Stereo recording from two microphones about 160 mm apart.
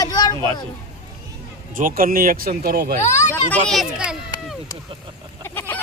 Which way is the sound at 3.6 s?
Centre (ahead or behind).